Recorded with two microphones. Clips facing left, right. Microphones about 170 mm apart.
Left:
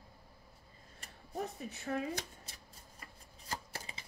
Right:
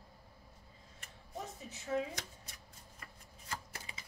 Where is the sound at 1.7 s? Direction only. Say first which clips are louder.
Right 3 dB; 60° left (ahead or behind).